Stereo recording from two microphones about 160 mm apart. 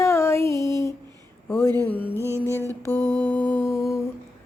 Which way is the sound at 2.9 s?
15° left (ahead or behind).